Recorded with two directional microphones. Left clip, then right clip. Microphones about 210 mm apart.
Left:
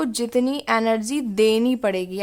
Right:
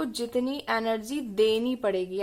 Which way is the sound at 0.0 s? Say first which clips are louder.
Left 7 dB; 25° left (ahead or behind).